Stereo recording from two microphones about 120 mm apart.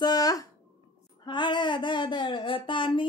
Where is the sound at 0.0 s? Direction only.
35° left (ahead or behind).